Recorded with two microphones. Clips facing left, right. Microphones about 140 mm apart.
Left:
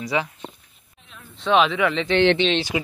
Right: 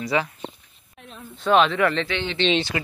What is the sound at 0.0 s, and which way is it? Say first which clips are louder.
Speech: right 1 dB; 15° left (ahead or behind).